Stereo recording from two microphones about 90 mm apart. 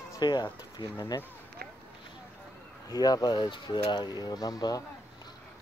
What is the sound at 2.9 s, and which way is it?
Speech, 45° left (ahead or behind).